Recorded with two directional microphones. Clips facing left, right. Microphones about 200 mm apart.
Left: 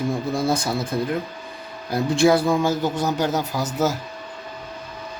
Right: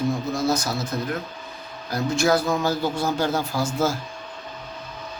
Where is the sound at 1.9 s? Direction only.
30° left (ahead or behind).